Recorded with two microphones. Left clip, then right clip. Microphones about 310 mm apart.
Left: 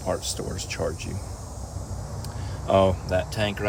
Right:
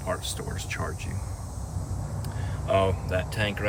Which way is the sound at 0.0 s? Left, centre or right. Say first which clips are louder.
Left 3 dB; centre.